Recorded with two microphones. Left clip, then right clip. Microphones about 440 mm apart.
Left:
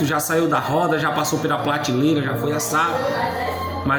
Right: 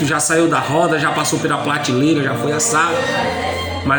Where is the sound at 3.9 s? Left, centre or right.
Left.